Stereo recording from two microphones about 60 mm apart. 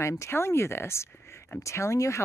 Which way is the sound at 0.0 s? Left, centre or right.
Left.